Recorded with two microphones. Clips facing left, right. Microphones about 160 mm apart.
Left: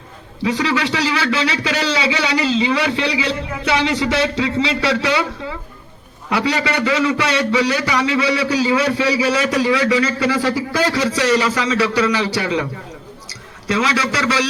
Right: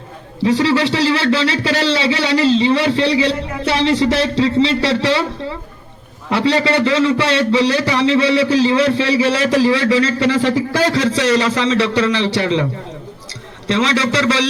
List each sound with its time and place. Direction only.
0.4 s a man's voice: 30° right (ahead or behind)
6.3 s a man's voice: 30° right (ahead or behind)
13.7 s a man's voice: 25° right (ahead or behind)